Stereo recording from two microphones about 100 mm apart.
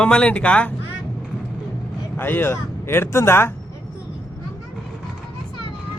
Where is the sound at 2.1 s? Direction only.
20° left (ahead or behind).